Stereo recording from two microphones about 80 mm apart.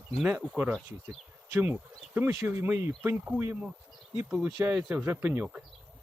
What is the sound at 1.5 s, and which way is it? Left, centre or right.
Speech, right.